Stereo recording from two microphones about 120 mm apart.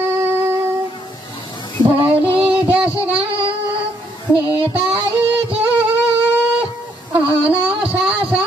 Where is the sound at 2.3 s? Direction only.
10° right (ahead or behind).